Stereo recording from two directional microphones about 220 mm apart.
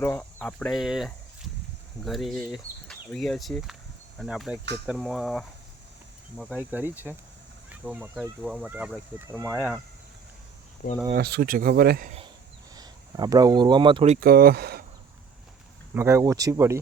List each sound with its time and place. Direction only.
0.0 s speech: 10° left (ahead or behind)
11.1 s speech: 45° right (ahead or behind)
12.7 s speech: 20° right (ahead or behind)
14.2 s speech: 45° right (ahead or behind)
16.0 s speech: 10° right (ahead or behind)